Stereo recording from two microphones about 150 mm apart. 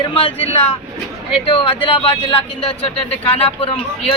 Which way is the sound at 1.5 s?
35° left (ahead or behind).